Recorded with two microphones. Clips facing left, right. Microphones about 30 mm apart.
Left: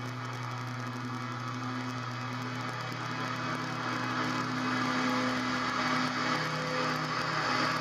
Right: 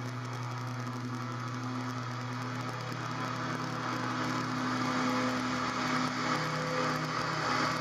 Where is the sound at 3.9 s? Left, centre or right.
Left.